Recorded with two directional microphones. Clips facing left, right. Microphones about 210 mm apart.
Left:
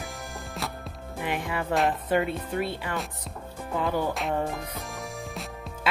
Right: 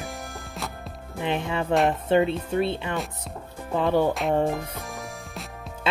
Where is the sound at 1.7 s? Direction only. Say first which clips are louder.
Right 3 dB; centre (ahead or behind).